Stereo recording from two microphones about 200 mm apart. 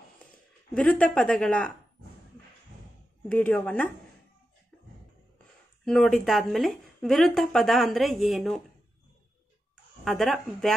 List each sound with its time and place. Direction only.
0.7 s speech: 5° left (ahead or behind)
3.3 s speech: 10° left (ahead or behind)
5.9 s speech: centre (ahead or behind)
10.0 s speech: centre (ahead or behind)